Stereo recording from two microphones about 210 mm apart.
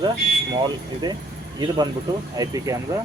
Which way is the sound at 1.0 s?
20° right (ahead or behind).